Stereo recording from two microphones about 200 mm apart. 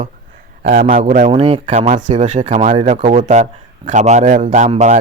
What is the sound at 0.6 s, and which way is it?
A man's voice, 40° right (ahead or behind).